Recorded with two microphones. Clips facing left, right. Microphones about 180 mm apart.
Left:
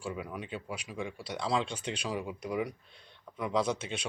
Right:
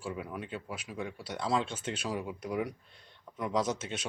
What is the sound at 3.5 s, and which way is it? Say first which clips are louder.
Speech: left 1 dB; 5° right (ahead or behind).